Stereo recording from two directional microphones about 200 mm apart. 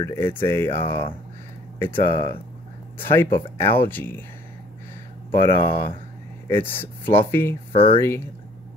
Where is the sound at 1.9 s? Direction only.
25° left (ahead or behind).